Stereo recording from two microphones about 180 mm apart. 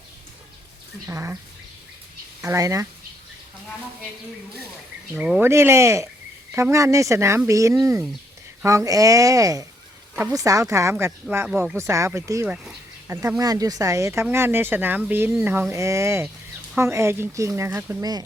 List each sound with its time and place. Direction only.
1.0 s speech: 15° right (ahead or behind)
2.4 s speech: 15° right (ahead or behind)
5.1 s speech: 5° right (ahead or behind)